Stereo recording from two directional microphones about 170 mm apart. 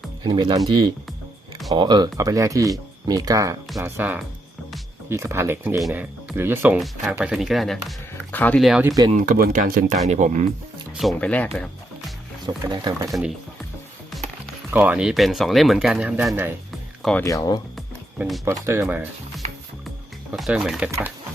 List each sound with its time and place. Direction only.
0.2 s speech: 25° right (ahead or behind)
1.7 s speech: 25° right (ahead or behind)
6.7 s speech: centre (ahead or behind)
9.0 s speech: 50° right (ahead or behind)
10.9 s speech: 5° left (ahead or behind)
11.5 s music: 5° left (ahead or behind)
12.5 s speech: 25° right (ahead or behind)
14.7 s speech: 10° right (ahead or behind)
17.0 s speech: 5° left (ahead or behind)
17.2 s speech: 20° left (ahead or behind)
17.7 s music: centre (ahead or behind)
18.4 s speech: 15° right (ahead or behind)
20.3 s speech: centre (ahead or behind)